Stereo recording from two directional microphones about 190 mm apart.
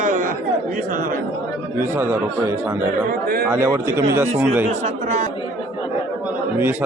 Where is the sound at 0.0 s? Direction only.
45° right (ahead or behind).